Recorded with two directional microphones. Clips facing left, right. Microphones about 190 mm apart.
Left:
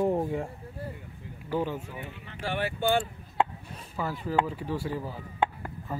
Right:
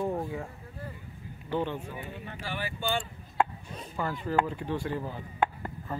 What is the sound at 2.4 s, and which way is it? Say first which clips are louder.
Speech: left 6 dB; 65° left (ahead or behind).